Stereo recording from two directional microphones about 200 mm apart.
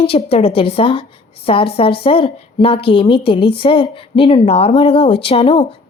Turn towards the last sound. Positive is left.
turn(degrees=30)  # may be behind; listen again after turning